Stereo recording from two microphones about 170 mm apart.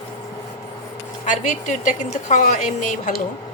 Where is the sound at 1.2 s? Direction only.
45° left (ahead or behind).